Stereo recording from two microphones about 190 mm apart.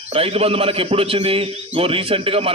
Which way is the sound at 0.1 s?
30° right (ahead or behind).